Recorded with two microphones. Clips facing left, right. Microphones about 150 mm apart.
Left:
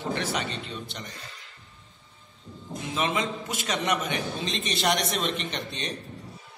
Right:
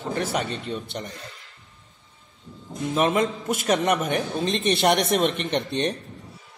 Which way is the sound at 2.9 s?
50° right (ahead or behind).